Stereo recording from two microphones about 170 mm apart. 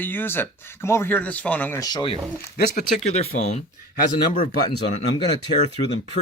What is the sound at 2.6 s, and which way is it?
Speech, 50° left (ahead or behind).